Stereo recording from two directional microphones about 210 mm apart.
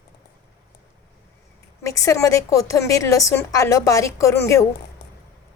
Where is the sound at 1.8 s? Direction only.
15° left (ahead or behind).